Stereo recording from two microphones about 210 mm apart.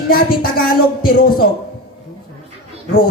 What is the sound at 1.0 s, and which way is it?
Speech, 45° left (ahead or behind).